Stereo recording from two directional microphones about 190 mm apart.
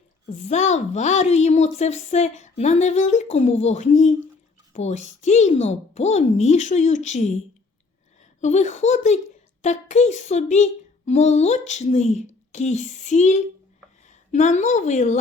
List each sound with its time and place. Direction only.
0.3 s speech: 35° left (ahead or behind)
8.4 s a woman's voice: 40° left (ahead or behind)